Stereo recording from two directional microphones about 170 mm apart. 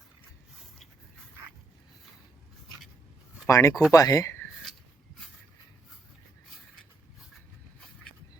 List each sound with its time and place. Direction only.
3.4 s speech: 20° left (ahead or behind)